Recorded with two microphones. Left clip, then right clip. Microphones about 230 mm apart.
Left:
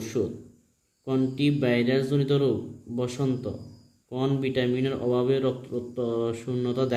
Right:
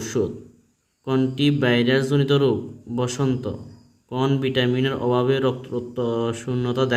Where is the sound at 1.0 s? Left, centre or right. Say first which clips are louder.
Right 4 dB; right.